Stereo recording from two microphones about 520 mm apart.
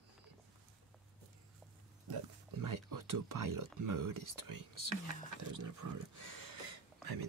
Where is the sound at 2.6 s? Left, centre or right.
Right.